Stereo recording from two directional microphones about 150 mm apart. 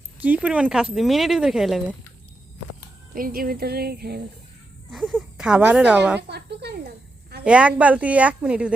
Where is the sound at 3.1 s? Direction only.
75° right (ahead or behind).